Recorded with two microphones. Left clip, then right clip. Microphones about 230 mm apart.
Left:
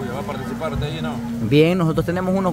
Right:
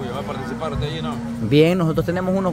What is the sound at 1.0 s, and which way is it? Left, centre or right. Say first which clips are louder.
Speech: left 1 dB; centre.